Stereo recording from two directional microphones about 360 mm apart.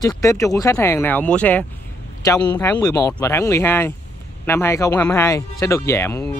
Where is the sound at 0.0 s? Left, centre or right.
Centre.